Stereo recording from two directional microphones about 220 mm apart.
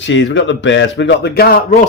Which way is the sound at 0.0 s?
55° left (ahead or behind).